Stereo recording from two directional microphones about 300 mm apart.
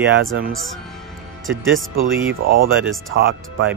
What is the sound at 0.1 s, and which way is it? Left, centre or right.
Speech, right.